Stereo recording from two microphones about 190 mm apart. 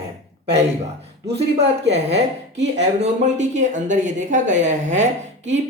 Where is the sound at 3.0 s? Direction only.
40° right (ahead or behind).